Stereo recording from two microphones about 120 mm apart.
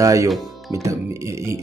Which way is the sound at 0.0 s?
25° right (ahead or behind).